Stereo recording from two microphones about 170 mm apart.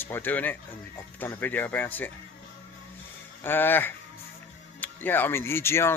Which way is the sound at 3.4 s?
10° left (ahead or behind).